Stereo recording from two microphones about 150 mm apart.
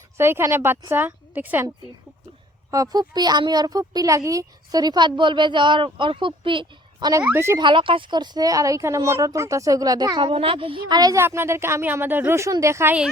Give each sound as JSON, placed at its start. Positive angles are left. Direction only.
{"t": 0.2, "sound": "a woman's voice", "side_deg": -15}
{"t": 2.6, "sound": "speech", "side_deg": -25}
{"t": 7.1, "sound": "a woman's voice", "side_deg": -15}
{"t": 7.6, "sound": "speech", "side_deg": -35}